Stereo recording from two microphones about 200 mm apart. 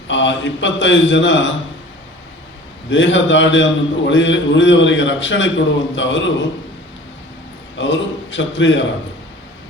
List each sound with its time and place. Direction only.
0.1 s a man's voice: 65° left (ahead or behind)
2.9 s a man's voice: 65° left (ahead or behind)
7.8 s a man's voice: 65° left (ahead or behind)